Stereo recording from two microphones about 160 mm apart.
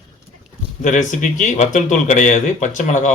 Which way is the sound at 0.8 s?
50° left (ahead or behind).